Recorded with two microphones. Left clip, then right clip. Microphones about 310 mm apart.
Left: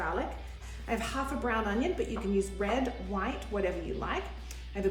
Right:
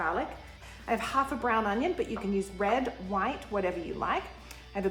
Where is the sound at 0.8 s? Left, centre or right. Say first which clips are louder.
Right 5 dB; right.